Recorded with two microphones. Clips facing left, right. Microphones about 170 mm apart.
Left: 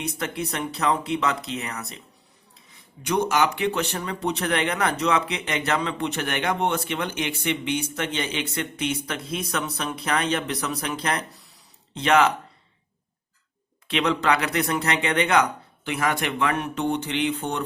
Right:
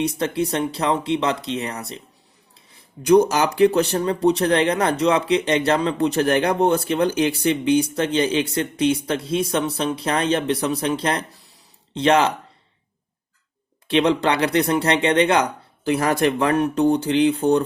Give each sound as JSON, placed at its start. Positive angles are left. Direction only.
{"t": 0.0, "sound": "speech", "side_deg": -30}
{"t": 3.0, "sound": "speech", "side_deg": -40}
{"t": 13.8, "sound": "speech", "side_deg": -30}